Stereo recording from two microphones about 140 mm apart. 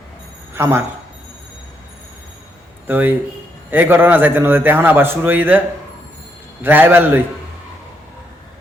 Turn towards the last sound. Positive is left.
turn(degrees=-15)  # may be behind; listen again after turning